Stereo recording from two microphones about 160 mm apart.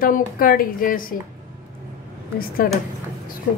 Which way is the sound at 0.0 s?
60° left (ahead or behind).